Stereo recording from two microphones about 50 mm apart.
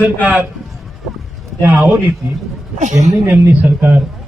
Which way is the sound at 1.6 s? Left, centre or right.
Right.